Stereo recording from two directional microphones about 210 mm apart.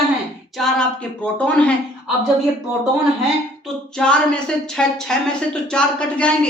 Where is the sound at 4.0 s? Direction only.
5° left (ahead or behind).